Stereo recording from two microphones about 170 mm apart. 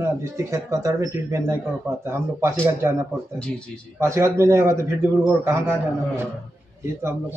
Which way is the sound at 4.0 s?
15° right (ahead or behind).